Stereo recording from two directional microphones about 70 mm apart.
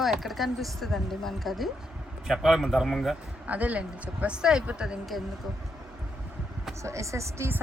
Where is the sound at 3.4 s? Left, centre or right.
Right.